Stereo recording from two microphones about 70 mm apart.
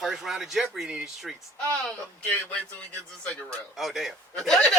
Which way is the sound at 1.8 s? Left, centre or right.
Centre.